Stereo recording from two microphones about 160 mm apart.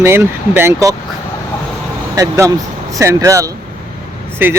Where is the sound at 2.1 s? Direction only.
20° right (ahead or behind).